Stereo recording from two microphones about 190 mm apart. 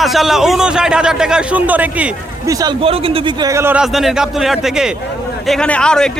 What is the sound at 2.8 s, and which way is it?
A man's voice, 30° right (ahead or behind).